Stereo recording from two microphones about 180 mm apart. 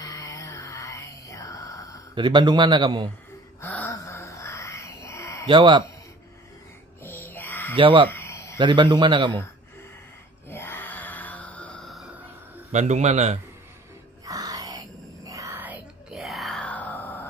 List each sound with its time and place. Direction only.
0.0 s music: 20° left (ahead or behind)
2.1 s a man's voice: 25° right (ahead or behind)
3.6 s a sound: 10° left (ahead or behind)
5.5 s a man's voice: 25° right (ahead or behind)
7.0 s music: 10° left (ahead or behind)
7.7 s a man's voice: 25° right (ahead or behind)
8.1 s a sound: 15° left (ahead or behind)
8.5 s a man's voice: 25° right (ahead or behind)
10.5 s music: 10° left (ahead or behind); by 12.3 s 5° right (ahead or behind)
12.7 s a man's voice: 40° right (ahead or behind)
14.2 s whispering: 20° right (ahead or behind); by 17.3 s 10° left (ahead or behind)